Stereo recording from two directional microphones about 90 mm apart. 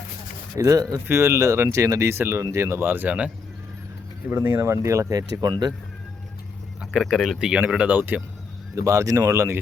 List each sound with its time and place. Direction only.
0.5 s speech: 40° right (ahead or behind)
1.0 s speech: 30° right (ahead or behind); by 5.7 s 50° right (ahead or behind)
7.0 s speech: 5° right (ahead or behind); by 8.2 s 20° right (ahead or behind)
8.7 s speech: 35° right (ahead or behind)